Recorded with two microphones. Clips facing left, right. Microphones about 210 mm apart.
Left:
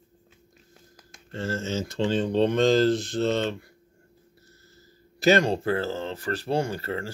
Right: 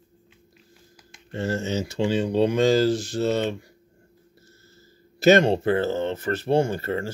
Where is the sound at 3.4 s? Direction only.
15° right (ahead or behind).